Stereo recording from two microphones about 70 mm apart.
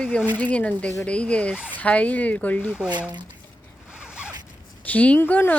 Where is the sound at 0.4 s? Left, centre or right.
Left.